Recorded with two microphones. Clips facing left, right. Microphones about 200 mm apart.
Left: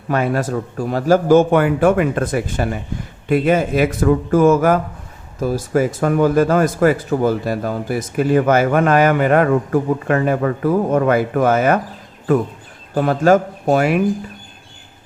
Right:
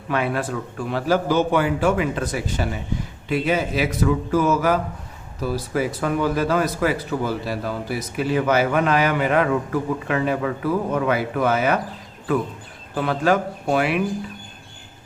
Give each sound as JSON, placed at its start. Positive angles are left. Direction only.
{"t": 0.1, "sound": "speech", "side_deg": 40}
{"t": 12.9, "sound": "speech", "side_deg": 45}